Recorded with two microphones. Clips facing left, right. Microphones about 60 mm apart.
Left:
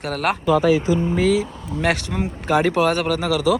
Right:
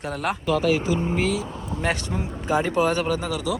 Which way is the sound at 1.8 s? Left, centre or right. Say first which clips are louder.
Left 5 dB; left.